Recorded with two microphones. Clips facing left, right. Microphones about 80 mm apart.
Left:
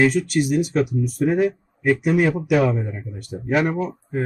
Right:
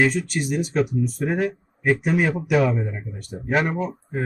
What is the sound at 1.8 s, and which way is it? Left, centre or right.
Speech, right.